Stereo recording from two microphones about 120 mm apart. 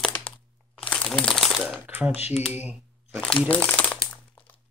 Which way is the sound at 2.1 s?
65° left (ahead or behind).